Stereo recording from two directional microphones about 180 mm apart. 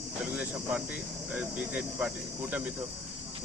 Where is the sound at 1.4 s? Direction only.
5° right (ahead or behind).